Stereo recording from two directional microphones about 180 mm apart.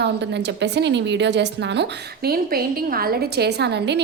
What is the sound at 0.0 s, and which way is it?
A woman's voice, 70° right (ahead or behind).